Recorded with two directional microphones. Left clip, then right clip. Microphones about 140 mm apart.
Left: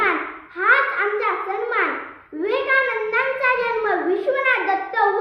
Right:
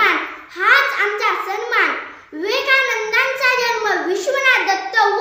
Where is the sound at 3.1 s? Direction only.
15° right (ahead or behind).